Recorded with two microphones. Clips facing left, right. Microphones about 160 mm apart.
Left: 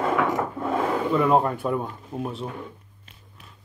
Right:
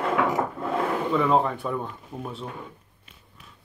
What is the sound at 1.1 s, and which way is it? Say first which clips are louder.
Speech: left 2 dB; 5° left (ahead or behind).